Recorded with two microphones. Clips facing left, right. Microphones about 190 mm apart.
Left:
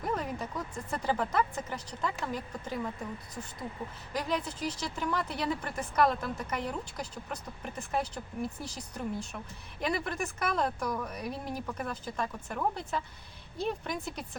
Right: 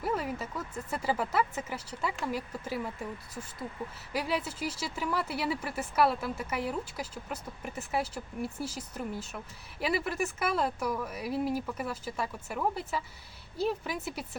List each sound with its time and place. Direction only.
0.0 s vehicle: 5° right (ahead or behind)
0.9 s speech: 5° right (ahead or behind)
4.1 s speech: 10° right (ahead or behind)